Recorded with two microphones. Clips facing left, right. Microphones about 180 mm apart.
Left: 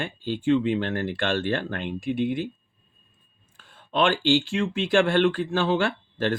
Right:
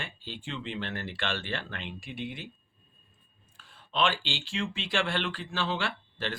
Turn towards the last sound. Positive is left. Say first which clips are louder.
# left 9 dB
turn(degrees=50)  # may be behind; listen again after turning